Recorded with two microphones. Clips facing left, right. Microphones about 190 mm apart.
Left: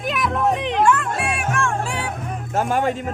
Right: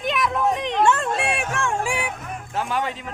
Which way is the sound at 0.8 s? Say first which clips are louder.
Even; 25° right (ahead or behind).